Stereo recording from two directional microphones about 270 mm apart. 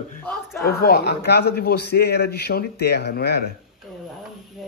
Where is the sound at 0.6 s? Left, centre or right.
Left.